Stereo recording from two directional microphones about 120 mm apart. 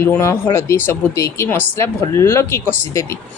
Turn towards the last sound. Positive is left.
turn(degrees=20)  # may be behind; listen again after turning